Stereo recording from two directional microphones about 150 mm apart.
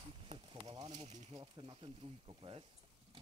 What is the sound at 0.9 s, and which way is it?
Speech, 50° right (ahead or behind).